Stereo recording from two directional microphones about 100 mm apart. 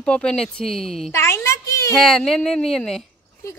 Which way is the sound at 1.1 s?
25° left (ahead or behind).